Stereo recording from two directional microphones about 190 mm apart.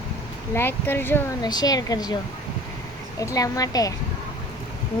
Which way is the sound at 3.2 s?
20° left (ahead or behind).